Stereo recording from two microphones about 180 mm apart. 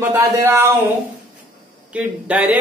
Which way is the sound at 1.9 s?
5° right (ahead or behind).